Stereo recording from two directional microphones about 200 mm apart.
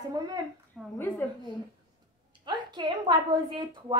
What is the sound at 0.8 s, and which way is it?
Speech, 5° left (ahead or behind).